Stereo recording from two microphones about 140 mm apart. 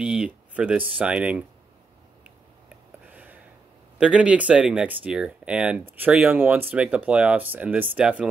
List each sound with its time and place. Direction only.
0.0 s speech: 5° right (ahead or behind)
3.1 s a sound: 10° right (ahead or behind)
4.0 s speech: 10° right (ahead or behind)